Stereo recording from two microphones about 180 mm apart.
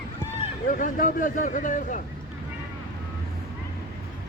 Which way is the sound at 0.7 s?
45° left (ahead or behind).